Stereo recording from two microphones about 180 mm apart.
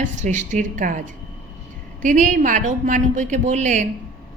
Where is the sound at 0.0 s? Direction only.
40° right (ahead or behind).